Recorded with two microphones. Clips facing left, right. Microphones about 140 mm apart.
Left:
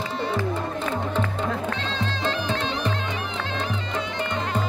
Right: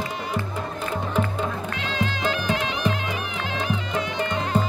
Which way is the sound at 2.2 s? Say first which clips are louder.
Even; 30° left (ahead or behind).